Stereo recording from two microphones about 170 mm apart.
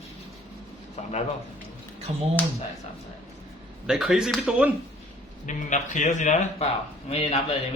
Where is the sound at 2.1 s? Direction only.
35° right (ahead or behind).